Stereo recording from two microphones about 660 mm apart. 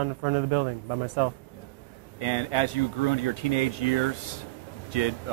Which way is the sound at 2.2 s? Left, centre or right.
Left.